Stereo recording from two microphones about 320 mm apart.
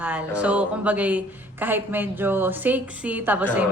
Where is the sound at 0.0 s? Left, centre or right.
Centre.